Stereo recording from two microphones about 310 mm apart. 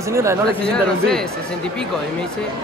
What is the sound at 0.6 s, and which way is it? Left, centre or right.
Speech, centre.